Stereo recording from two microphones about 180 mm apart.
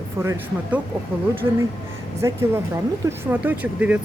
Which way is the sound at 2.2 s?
15° right (ahead or behind).